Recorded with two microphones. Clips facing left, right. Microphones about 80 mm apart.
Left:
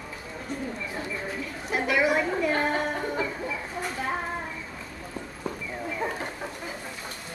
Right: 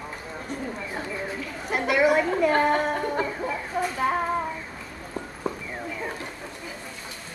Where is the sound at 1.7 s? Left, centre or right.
Right.